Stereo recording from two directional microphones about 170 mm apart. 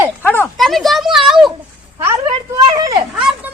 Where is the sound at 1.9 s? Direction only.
20° right (ahead or behind).